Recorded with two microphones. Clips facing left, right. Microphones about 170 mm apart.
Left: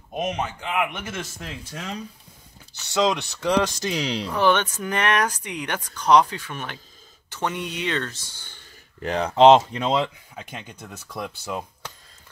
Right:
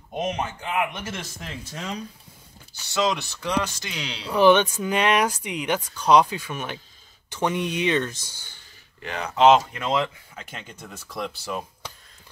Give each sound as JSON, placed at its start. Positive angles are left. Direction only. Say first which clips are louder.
{"t": 0.1, "sound": "speech", "louder": "even", "side_deg": 10}
{"t": 2.9, "sound": "speech", "louder": "left 2 dB", "side_deg": 25}
{"t": 3.6, "sound": "speech", "louder": "left 7 dB", "side_deg": 35}
{"t": 4.3, "sound": "speech", "louder": "right 5 dB", "side_deg": -10}
{"t": 9.0, "sound": "speech", "louder": "left 3 dB", "side_deg": 35}